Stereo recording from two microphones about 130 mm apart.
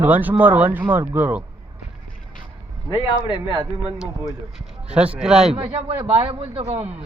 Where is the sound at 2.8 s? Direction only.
35° left (ahead or behind).